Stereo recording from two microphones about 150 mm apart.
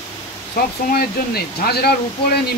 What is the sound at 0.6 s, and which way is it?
Speech, 90° left.